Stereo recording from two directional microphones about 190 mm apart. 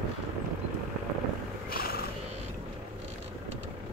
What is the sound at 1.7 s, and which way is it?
Music, 50° left (ahead or behind).